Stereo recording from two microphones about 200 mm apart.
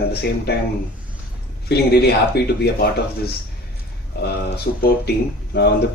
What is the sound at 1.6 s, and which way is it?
Speech, 55° left (ahead or behind).